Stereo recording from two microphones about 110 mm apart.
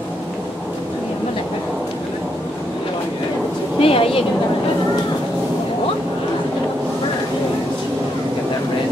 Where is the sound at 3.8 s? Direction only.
60° left (ahead or behind).